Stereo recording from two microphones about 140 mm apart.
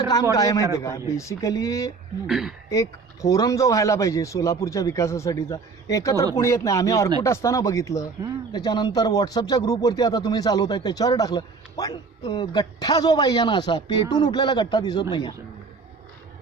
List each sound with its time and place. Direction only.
0.1 s speech: 25° left (ahead or behind)
2.2 s speech: 5° right (ahead or behind)
2.6 s a man's voice: 25° left (ahead or behind)